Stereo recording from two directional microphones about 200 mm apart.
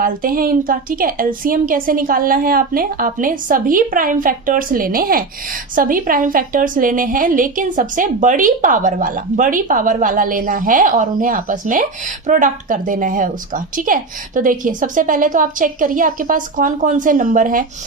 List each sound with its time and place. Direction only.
0.0 s a woman's voice: 45° right (ahead or behind)